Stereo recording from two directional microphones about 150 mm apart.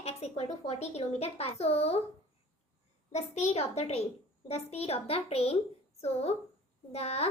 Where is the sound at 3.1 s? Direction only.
45° left (ahead or behind).